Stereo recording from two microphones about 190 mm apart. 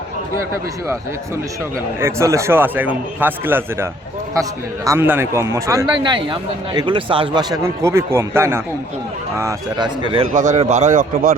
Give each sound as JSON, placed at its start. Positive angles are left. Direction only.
{"t": 2.0, "sound": "a man's voice", "side_deg": -15}
{"t": 4.9, "sound": "a man's voice", "side_deg": -10}
{"t": 10.3, "sound": "a man's voice", "side_deg": -40}